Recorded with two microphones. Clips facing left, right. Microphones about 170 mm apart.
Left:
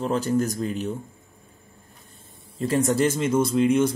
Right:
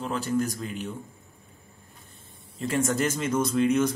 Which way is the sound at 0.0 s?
40° left (ahead or behind).